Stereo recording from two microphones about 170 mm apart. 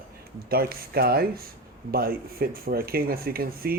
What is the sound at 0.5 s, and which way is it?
Speech, 65° right (ahead or behind).